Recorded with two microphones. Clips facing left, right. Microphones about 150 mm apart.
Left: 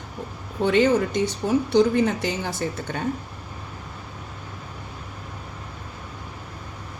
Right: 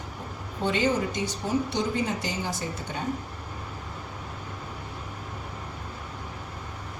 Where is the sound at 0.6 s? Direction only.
60° left (ahead or behind).